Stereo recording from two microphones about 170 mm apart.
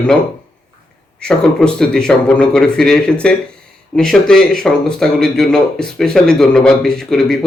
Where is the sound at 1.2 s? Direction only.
5° left (ahead or behind).